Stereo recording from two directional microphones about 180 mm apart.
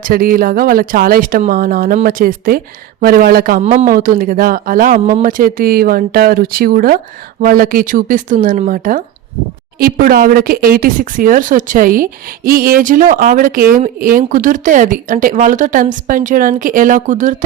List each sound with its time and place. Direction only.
0.0 s speech: 50° right (ahead or behind)
3.6 s speech: 40° right (ahead or behind)